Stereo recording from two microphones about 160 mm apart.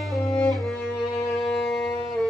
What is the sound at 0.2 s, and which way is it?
Music, 20° left (ahead or behind).